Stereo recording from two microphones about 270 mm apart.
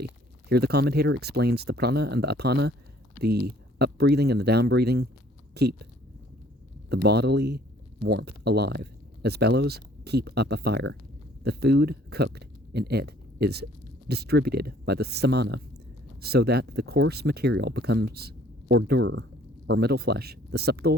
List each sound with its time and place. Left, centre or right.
0.0 s speech: right
6.9 s speech: right